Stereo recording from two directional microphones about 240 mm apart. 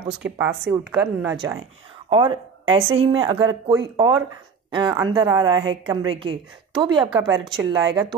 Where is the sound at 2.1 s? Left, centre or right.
Right.